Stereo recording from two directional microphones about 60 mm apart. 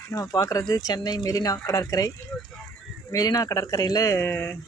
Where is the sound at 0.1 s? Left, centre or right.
Left.